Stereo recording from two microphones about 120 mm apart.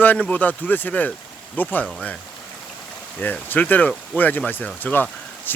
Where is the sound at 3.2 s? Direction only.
15° left (ahead or behind).